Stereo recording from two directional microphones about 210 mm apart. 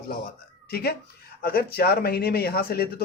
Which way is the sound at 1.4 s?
45° left (ahead or behind).